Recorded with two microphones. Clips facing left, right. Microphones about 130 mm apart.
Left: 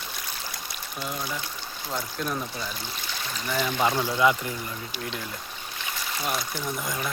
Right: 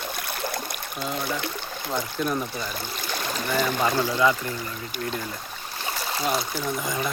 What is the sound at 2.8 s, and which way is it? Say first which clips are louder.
Stream: right 5 dB; 50° right (ahead or behind).